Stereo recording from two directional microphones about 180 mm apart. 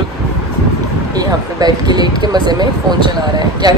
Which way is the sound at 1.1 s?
20° right (ahead or behind).